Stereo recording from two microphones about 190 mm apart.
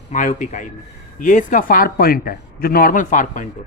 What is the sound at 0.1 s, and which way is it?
A man's voice, 40° left (ahead or behind).